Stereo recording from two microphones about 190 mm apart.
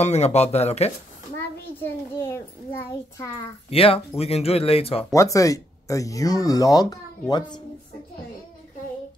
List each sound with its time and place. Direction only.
0.0 s speech: 35° left (ahead or behind)
1.8 s speech: 15° left (ahead or behind)
3.7 s speech: 30° left (ahead or behind)
5.1 s speech: 15° left (ahead or behind)